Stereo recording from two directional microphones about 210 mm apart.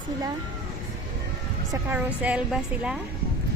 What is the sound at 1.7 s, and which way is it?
A woman's voice, 10° right (ahead or behind).